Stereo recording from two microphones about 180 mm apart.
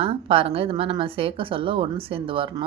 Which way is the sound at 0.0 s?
30° right (ahead or behind).